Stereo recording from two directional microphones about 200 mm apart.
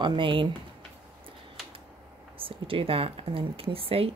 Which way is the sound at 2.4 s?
25° right (ahead or behind).